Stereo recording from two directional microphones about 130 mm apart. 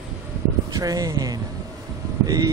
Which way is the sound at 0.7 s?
25° right (ahead or behind).